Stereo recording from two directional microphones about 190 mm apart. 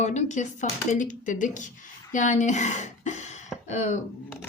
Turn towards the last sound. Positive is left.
turn(degrees=35)  # may be behind; listen again after turning